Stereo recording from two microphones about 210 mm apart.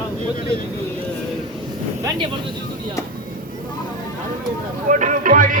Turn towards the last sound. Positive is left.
turn(degrees=-40)  # may be behind; listen again after turning